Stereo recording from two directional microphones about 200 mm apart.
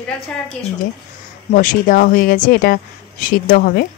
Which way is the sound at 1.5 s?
45° left (ahead or behind).